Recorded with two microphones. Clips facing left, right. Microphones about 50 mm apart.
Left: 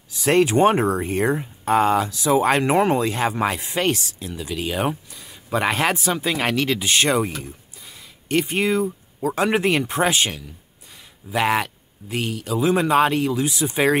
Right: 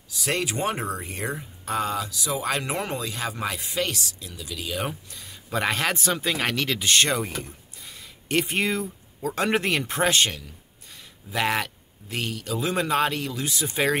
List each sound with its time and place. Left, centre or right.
0.1 s speech: left
5.1 s speech: centre
7.4 s a sound: centre
9.2 s speech: centre